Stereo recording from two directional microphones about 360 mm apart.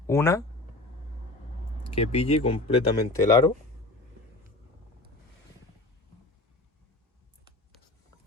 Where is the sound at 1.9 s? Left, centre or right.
Centre.